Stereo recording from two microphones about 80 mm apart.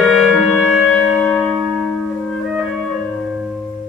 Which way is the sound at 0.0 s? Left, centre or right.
Centre.